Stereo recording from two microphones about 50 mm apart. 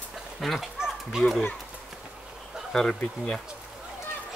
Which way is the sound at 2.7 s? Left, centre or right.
Centre.